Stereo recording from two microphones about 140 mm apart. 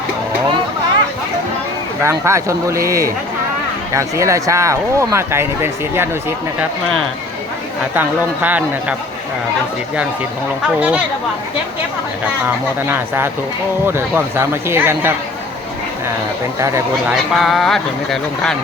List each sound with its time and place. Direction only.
2.0 s speech: 20° right (ahead or behind)
7.9 s speech: 10° right (ahead or behind)
10.8 s speech: 10° right (ahead or behind)
12.9 s speech: 15° right (ahead or behind)
17.1 s speech: centre (ahead or behind)